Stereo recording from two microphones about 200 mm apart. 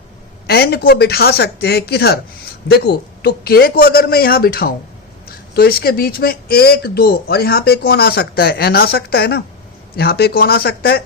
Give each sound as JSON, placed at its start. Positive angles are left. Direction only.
{"t": 0.4, "sound": "speech", "side_deg": 50}